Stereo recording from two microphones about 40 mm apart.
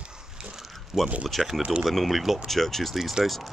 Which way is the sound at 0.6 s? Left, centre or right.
Centre.